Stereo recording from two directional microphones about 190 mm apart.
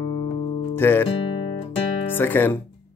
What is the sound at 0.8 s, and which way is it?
Speech, 10° left (ahead or behind).